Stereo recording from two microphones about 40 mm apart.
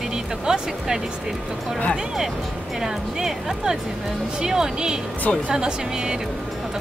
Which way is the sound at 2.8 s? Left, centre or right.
Centre.